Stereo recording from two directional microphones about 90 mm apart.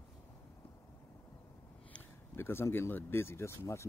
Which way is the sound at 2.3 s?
25° left (ahead or behind).